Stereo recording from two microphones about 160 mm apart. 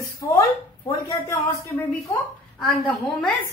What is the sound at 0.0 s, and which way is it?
Speech, 20° left (ahead or behind).